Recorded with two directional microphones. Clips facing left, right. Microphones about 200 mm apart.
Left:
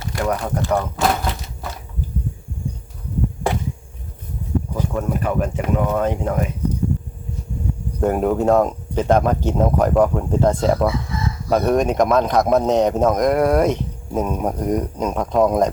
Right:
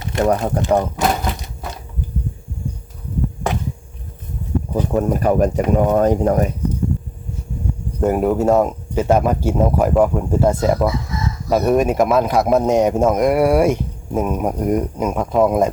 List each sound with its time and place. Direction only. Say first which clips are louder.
0.0 s a sound: right 5 dB; 25° right (ahead or behind)
4.7 s speech: right 8 dB; 35° right (ahead or behind)
8.0 s speech: right 1 dB; 5° right (ahead or behind)